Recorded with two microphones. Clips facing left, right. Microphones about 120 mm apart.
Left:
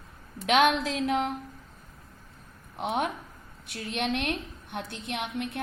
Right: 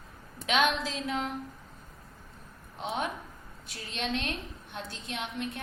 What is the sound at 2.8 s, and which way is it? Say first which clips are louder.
A woman's voice: left 4 dB; 60° left (ahead or behind).